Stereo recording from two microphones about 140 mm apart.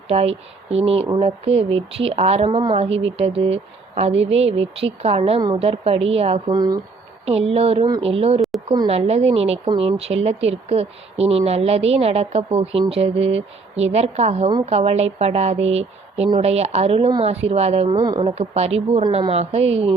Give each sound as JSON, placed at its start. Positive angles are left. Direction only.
{"t": 0.1, "sound": "a woman's voice", "side_deg": -45}
{"t": 6.5, "sound": "speech", "side_deg": -30}
{"t": 7.3, "sound": "a woman's voice", "side_deg": -45}
{"t": 17.9, "sound": "speech", "side_deg": -25}
{"t": 18.2, "sound": "a woman's voice", "side_deg": -45}